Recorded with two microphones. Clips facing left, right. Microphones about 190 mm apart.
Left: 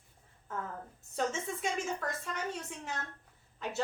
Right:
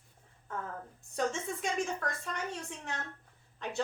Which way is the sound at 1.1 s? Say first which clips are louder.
Right 1 dB; centre (ahead or behind).